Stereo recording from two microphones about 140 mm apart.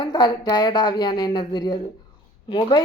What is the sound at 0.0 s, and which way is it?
A woman's voice, 30° left (ahead or behind).